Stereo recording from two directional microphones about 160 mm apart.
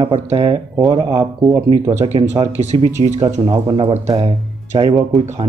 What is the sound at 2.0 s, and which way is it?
Speech, 45° right (ahead or behind).